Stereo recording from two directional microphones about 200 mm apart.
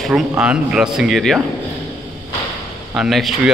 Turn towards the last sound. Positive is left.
turn(degrees=0)  # may be behind; listen again after turning